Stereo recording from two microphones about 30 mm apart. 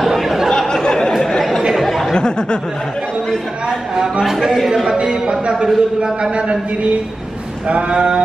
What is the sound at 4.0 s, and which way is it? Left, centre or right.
Speech, centre.